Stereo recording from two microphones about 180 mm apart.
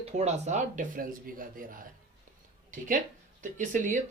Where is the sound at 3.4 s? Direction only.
45° right (ahead or behind).